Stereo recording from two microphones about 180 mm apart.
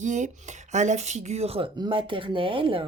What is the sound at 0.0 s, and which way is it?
Speech, 40° right (ahead or behind).